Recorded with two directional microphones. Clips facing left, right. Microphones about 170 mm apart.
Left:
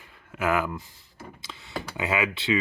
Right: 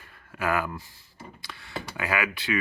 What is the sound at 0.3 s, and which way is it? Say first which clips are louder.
Speech: left 2 dB; 20° left (ahead or behind).